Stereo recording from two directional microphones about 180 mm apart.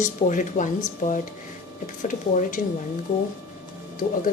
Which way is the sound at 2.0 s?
45° left (ahead or behind).